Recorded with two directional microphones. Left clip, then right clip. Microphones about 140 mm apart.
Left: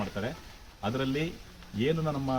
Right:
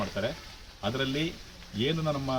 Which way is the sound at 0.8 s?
5° right (ahead or behind).